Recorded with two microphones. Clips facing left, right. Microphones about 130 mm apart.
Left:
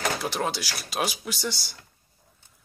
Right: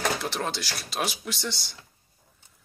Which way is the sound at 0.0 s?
5° left (ahead or behind).